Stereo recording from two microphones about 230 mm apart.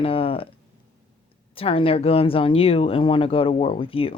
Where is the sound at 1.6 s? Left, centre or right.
Left.